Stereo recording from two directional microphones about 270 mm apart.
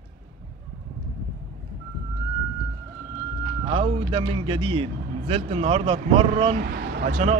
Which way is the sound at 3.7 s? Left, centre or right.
Right.